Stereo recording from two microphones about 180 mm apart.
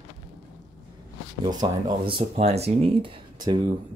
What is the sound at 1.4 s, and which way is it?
Speech, 25° right (ahead or behind).